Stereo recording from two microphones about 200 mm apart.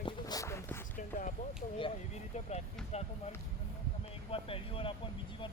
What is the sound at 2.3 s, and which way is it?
Vehicle, 35° left (ahead or behind).